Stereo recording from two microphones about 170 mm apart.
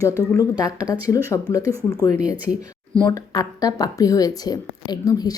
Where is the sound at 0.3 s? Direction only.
20° left (ahead or behind).